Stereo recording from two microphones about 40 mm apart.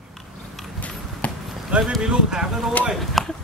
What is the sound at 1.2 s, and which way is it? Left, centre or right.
Basketball bounce, left.